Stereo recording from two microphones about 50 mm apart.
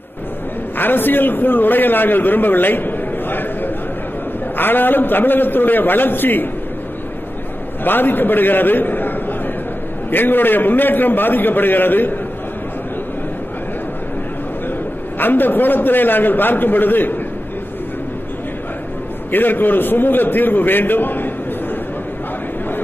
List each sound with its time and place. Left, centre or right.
0.7 s a man's voice: left
7.8 s a man's voice: left
10.1 s a man's voice: left
15.1 s a man's voice: left
19.3 s a man's voice: left